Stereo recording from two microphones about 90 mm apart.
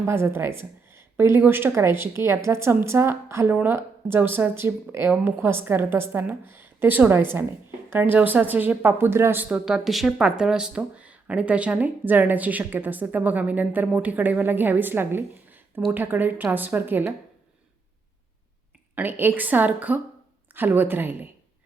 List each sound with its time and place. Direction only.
0.0 s speech: 25° right (ahead or behind)
9.5 s speech: 10° right (ahead or behind)
18.9 s speech: 20° right (ahead or behind)